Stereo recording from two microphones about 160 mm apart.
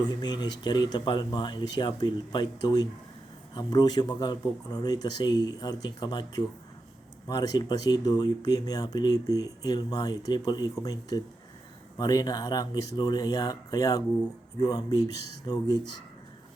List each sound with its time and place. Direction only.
0.2 s speech: 25° left (ahead or behind)